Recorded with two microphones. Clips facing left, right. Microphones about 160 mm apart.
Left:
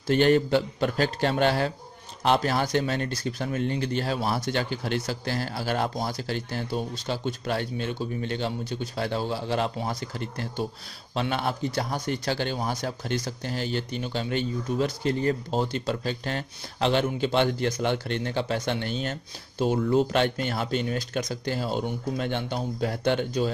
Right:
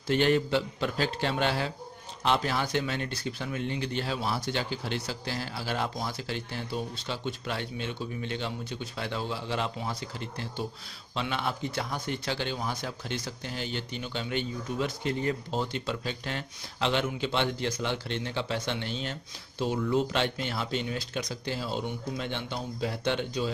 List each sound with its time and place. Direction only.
0.0 s a man's voice: 40° left (ahead or behind)